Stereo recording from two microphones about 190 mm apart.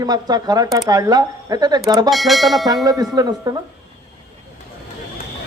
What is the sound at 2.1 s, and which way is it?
Speech, centre (ahead or behind).